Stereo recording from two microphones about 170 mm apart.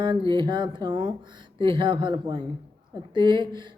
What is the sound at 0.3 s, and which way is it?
Speech, 30° right (ahead or behind).